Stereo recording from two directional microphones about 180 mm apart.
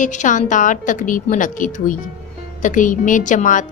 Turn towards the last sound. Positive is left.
turn(degrees=45)  # may be behind; listen again after turning